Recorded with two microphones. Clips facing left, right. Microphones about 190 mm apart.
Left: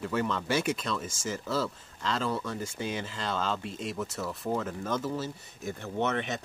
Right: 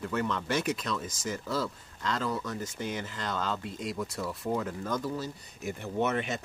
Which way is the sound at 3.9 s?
Centre (ahead or behind).